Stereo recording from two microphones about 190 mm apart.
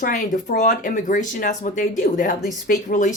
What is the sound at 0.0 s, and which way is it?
A woman's voice, 45° left (ahead or behind).